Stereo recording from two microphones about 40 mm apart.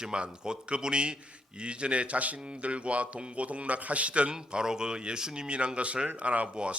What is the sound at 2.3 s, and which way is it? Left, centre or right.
A man's voice, right.